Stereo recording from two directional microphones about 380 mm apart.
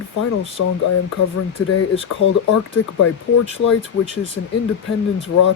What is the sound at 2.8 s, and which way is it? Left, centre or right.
Speech, left.